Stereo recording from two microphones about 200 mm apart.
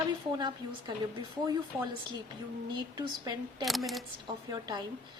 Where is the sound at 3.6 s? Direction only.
Centre (ahead or behind).